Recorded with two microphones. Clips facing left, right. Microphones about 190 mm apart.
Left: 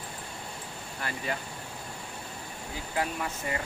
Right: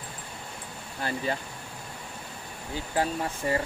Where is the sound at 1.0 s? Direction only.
30° right (ahead or behind).